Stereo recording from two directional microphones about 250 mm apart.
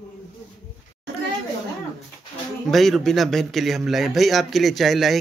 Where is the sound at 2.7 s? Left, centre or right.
Centre.